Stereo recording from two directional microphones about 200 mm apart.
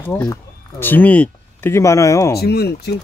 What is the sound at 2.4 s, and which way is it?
Speech, 55° left (ahead or behind).